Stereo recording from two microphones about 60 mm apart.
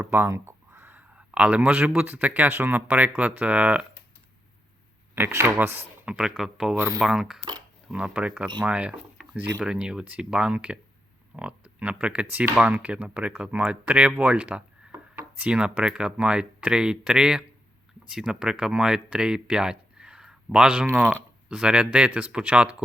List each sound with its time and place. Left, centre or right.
0.0 s speech: right
0.3 s a sound: right
0.9 s speech: right
5.1 s speech: right
6.1 s speech: centre
7.9 s speech: centre
20.8 s speech: right
21.5 s speech: centre